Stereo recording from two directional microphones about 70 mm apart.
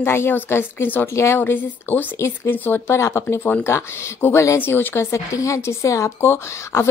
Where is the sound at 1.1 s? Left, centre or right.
Left.